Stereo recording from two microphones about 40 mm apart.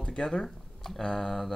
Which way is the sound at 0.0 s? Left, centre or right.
Left.